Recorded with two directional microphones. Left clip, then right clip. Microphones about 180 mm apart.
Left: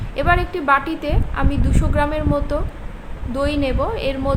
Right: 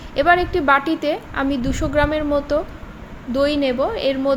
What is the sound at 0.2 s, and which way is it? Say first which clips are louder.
A woman's voice: right 3 dB; 25° right (ahead or behind).